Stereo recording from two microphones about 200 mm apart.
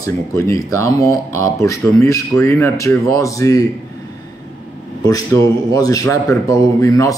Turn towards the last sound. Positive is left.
turn(degrees=15)  # may be behind; listen again after turning